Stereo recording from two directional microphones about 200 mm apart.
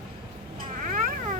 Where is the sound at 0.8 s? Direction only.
40° right (ahead or behind).